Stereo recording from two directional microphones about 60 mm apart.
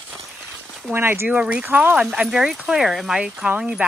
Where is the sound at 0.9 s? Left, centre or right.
Right.